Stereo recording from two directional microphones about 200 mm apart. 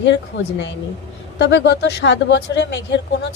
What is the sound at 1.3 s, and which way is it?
Speech, 60° left (ahead or behind).